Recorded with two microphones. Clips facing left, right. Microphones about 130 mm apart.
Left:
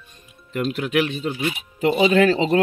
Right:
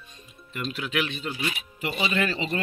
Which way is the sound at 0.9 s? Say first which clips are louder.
Left 7 dB; 35° left (ahead or behind).